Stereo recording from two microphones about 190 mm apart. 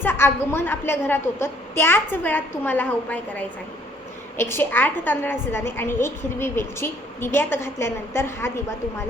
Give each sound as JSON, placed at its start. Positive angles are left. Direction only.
{"t": 0.0, "sound": "a woman's voice", "side_deg": 10}